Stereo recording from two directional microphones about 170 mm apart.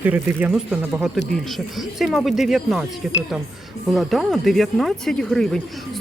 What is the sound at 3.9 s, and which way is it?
Speech, centre (ahead or behind).